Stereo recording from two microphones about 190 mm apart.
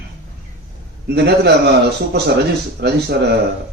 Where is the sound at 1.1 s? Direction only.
60° right (ahead or behind).